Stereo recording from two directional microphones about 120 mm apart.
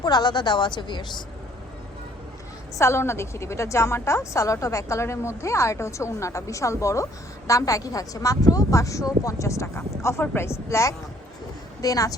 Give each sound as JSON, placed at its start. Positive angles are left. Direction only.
{"t": 0.0, "sound": "a woman's voice", "side_deg": 35}
{"t": 2.7, "sound": "a woman's voice", "side_deg": 25}